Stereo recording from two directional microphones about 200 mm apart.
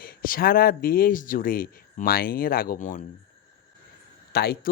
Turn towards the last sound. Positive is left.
turn(degrees=50)  # may be behind; listen again after turning